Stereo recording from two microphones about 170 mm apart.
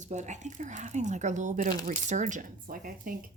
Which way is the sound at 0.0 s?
45° right (ahead or behind).